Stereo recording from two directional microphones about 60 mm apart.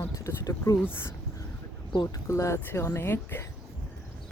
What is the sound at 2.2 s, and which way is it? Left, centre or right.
Speech, left.